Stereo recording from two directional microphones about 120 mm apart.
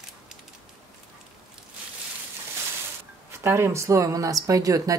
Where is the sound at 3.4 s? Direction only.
20° right (ahead or behind).